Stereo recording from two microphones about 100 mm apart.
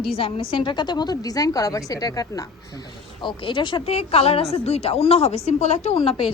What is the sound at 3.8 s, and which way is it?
Speech, 80° left.